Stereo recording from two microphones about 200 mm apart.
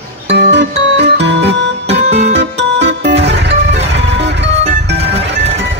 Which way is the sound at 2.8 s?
60° right (ahead or behind).